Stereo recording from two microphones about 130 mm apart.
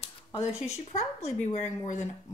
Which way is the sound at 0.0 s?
50° left (ahead or behind).